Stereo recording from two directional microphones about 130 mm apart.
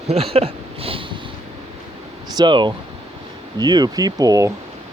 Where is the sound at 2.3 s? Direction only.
35° right (ahead or behind).